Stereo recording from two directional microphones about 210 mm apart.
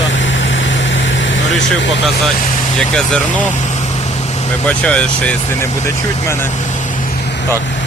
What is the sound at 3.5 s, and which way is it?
Vehicle, 35° left (ahead or behind).